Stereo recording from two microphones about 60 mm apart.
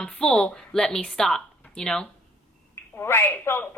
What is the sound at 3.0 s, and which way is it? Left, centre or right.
Speech, left.